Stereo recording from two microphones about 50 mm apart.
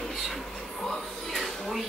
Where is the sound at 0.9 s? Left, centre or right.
Centre.